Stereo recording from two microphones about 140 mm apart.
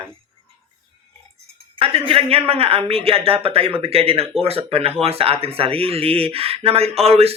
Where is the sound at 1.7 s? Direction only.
40° right (ahead or behind).